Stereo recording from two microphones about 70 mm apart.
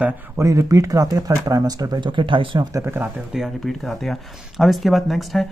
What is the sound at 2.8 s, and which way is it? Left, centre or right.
Speech, right.